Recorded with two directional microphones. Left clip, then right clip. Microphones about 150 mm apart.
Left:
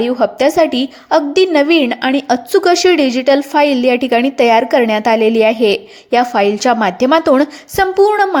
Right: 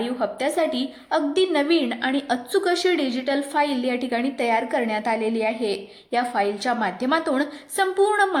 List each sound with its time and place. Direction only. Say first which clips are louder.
0.2 s a woman's voice: left 11 dB; 45° left (ahead or behind)
8.1 s speech: left 7 dB; 40° left (ahead or behind)